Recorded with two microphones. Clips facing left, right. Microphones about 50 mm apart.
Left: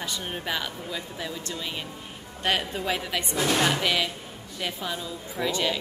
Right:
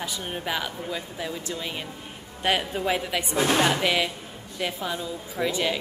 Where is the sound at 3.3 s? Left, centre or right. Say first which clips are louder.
Right 2 dB; right.